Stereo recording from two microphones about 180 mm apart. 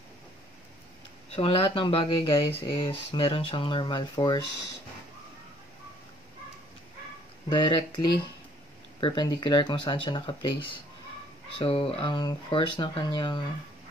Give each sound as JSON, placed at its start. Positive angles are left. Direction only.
{"t": 1.3, "sound": "speech", "side_deg": 30}
{"t": 7.4, "sound": "speech", "side_deg": 25}